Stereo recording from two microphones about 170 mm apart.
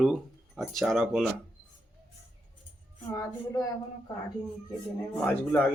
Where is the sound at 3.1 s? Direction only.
20° left (ahead or behind).